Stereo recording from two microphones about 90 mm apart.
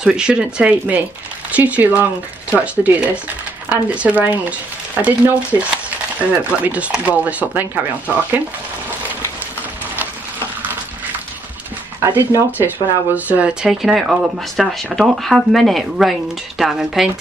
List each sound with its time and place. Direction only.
0.0 s speech: 10° right (ahead or behind)
12.1 s speech: 25° right (ahead or behind)
13.7 s speech: 5° right (ahead or behind)